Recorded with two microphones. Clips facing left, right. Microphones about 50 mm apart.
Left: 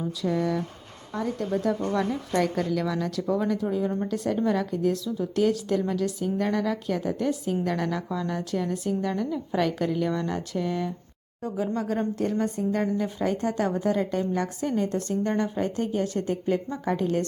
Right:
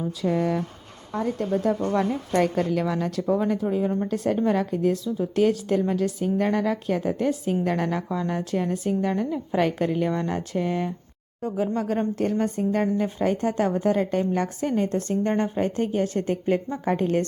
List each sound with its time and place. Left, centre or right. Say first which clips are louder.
0.2 s a woman's voice: right 2 dB; right